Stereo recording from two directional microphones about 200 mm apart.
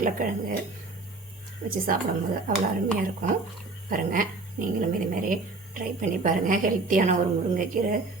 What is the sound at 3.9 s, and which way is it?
Speech, 45° right (ahead or behind).